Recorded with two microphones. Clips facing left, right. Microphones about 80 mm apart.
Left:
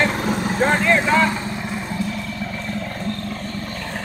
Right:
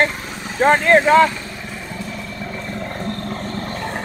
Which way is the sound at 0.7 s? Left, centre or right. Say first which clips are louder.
Right 7 dB; right.